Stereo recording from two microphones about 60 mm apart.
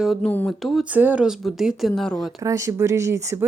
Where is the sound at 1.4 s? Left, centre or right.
Centre.